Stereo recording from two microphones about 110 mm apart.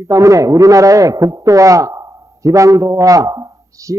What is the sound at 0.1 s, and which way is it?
A man's voice, 30° right (ahead or behind).